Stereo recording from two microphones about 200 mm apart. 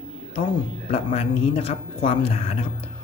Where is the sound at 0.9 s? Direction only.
30° left (ahead or behind).